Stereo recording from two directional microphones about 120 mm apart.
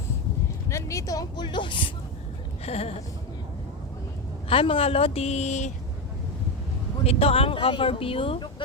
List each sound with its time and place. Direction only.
0.7 s speech: 25° left (ahead or behind); by 1.9 s 40° left (ahead or behind)
2.6 s a woman's voice: 55° left (ahead or behind)
4.4 s a woman's voice: 50° left (ahead or behind); by 5.7 s 75° left (ahead or behind)
7.0 s speech: 55° left (ahead or behind)